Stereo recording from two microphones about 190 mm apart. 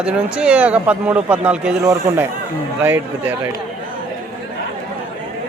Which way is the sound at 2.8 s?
10° right (ahead or behind).